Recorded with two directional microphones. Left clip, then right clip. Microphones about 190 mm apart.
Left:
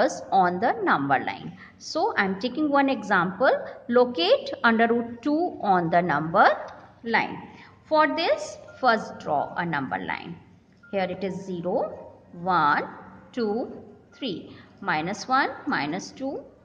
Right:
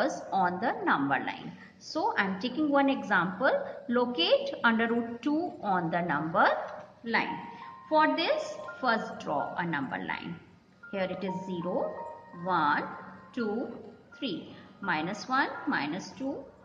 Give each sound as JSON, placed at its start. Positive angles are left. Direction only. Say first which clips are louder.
{"t": 0.0, "sound": "a woman's voice", "louder": "left 7 dB", "side_deg": 45}
{"t": 7.9, "sound": "a woman's voice", "louder": "left 4 dB", "side_deg": 50}